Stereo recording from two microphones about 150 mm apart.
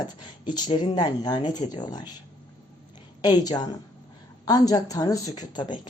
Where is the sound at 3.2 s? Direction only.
25° left (ahead or behind).